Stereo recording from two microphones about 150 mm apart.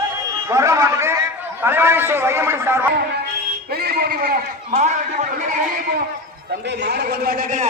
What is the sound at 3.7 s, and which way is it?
Speech, 90° right.